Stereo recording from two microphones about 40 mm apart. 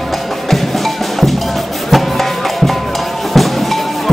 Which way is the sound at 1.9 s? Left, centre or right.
Centre.